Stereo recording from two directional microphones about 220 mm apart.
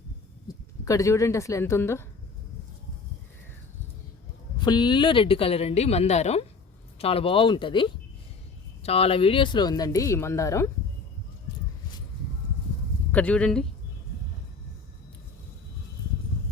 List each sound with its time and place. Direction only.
0.4 s speech: 15° left (ahead or behind)
4.6 s a woman's voice: 20° left (ahead or behind)
13.1 s speech: 5° left (ahead or behind)